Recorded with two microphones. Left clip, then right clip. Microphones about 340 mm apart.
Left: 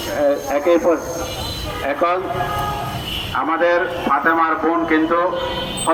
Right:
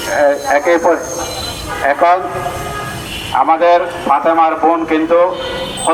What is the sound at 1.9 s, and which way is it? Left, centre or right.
Speech, centre.